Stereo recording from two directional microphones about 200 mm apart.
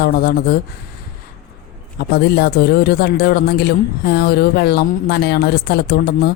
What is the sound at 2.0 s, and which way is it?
Speech, 55° left (ahead or behind).